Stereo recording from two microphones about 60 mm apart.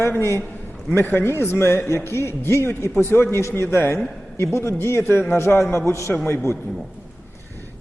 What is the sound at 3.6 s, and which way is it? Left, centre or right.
A man's voice, left.